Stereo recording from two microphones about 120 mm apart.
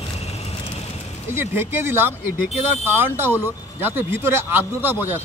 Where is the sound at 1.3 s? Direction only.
20° right (ahead or behind).